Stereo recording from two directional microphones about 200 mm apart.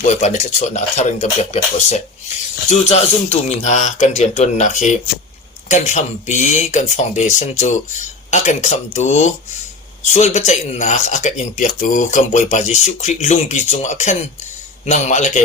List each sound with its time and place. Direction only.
0.0 s speech: 35° left (ahead or behind)